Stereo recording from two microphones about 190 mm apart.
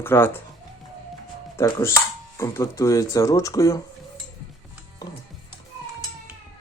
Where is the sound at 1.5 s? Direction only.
15° left (ahead or behind).